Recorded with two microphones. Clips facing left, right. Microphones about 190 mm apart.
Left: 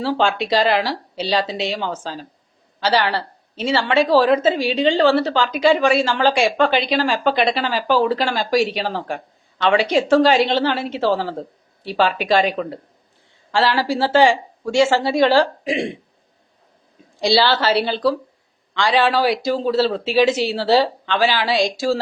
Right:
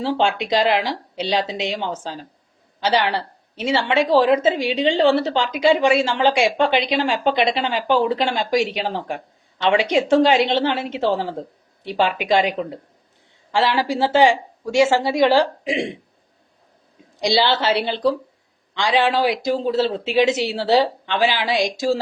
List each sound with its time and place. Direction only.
0.0 s a woman's voice: 20° right (ahead or behind)
17.2 s a woman's voice: 20° right (ahead or behind)